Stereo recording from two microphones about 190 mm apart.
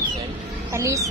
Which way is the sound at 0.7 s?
15° right (ahead or behind).